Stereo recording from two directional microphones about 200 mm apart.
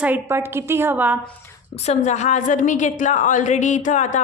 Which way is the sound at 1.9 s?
35° left (ahead or behind).